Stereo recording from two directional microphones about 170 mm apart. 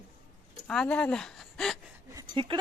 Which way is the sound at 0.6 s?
5° left (ahead or behind).